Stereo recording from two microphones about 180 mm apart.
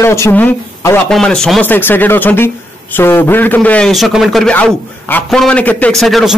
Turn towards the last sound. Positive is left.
turn(degrees=0)  # may be behind; listen again after turning